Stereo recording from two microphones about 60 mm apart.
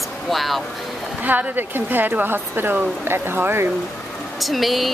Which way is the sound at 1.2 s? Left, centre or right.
Right.